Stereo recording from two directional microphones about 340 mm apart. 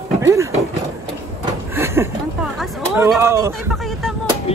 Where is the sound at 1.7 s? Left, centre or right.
Centre.